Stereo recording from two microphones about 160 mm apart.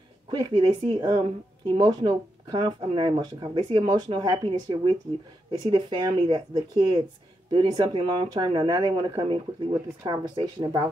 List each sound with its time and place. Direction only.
0.3 s speech: 25° right (ahead or behind)